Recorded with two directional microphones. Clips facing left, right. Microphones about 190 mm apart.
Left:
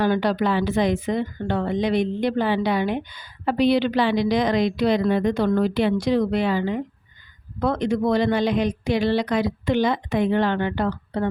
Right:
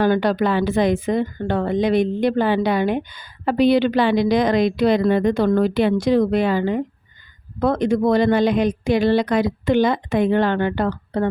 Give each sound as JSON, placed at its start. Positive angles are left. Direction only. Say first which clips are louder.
{"t": 0.0, "sound": "speech", "louder": "right 3 dB", "side_deg": -50}